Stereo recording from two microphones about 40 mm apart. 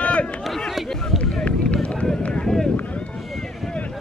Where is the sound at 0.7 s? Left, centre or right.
Centre.